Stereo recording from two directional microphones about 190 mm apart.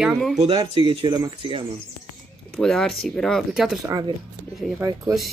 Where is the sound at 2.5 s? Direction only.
Centre (ahead or behind).